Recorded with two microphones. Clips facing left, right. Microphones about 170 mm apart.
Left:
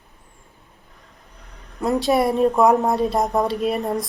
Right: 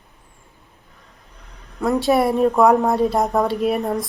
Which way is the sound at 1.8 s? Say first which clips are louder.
Right 1 dB; centre (ahead or behind).